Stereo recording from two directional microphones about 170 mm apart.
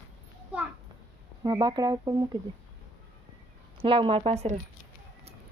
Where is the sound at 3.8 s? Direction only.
30° right (ahead or behind).